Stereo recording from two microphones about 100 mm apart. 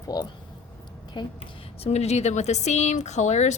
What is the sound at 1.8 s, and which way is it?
Speech, 90° left.